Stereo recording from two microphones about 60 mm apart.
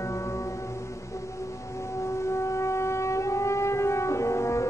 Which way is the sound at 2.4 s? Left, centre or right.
Left.